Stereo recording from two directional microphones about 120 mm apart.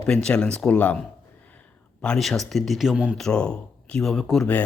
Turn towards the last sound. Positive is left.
turn(degrees=0)  # may be behind; listen again after turning